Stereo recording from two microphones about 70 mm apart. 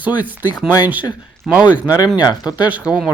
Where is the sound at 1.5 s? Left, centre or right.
Right.